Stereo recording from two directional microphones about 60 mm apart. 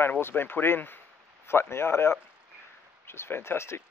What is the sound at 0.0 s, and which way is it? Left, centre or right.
Speech, left.